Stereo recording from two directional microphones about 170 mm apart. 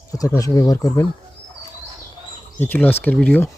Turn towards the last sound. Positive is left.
turn(degrees=5)  # may be behind; listen again after turning